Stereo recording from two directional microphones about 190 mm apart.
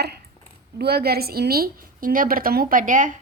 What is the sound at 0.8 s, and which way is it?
A woman's voice, 55° right (ahead or behind).